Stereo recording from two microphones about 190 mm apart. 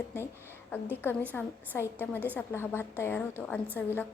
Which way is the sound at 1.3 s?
10° left (ahead or behind).